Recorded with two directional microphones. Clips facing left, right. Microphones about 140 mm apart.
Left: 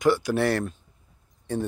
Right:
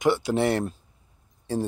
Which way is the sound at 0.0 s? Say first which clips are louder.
Even; 20° right (ahead or behind).